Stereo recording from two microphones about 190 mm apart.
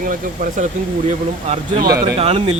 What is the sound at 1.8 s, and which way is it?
Speech, 55° right (ahead or behind).